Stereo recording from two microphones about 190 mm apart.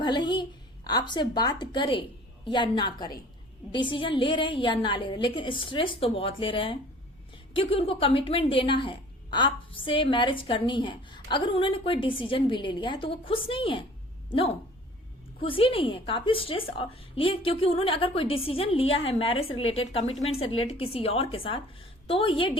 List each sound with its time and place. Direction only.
0.0 s a woman's voice: 25° left (ahead or behind)